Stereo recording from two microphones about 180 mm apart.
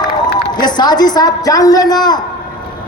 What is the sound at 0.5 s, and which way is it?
Speech, 25° left (ahead or behind).